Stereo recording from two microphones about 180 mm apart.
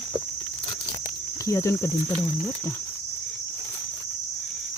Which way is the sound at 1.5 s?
15° left (ahead or behind).